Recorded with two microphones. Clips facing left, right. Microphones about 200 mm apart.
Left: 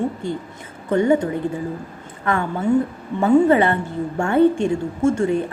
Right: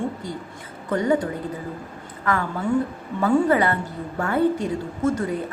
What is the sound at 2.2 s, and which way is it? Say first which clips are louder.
A woman's voice: left 4 dB; 25° left (ahead or behind).